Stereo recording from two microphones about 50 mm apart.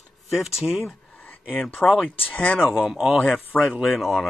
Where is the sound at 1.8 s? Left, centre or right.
Centre.